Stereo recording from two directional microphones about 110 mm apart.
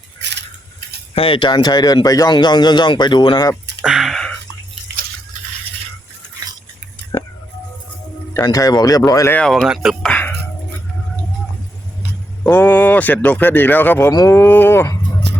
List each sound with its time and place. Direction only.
1.1 s a man's voice: 55° left (ahead or behind)
3.8 s a sound: 5° right (ahead or behind)
8.3 s speech: 30° left (ahead or behind)
9.5 s speech: centre (ahead or behind)
10.1 s music: 15° left (ahead or behind)
12.4 s speech: 15° left (ahead or behind)
14.1 s speech: 35° left (ahead or behind)
14.3 s speech: 20° left (ahead or behind)